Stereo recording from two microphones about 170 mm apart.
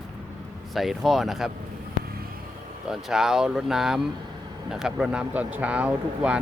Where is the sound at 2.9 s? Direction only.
Centre (ahead or behind).